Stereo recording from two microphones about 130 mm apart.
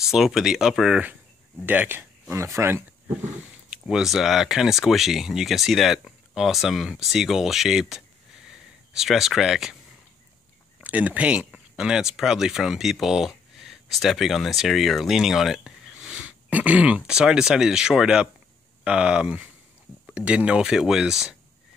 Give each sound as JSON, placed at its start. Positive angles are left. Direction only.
{"t": 0.0, "sound": "speech", "side_deg": -5}
{"t": 3.7, "sound": "speech", "side_deg": -5}
{"t": 10.8, "sound": "speech", "side_deg": -10}